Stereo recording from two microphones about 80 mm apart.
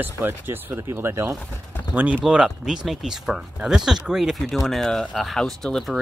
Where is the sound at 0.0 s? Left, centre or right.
Right.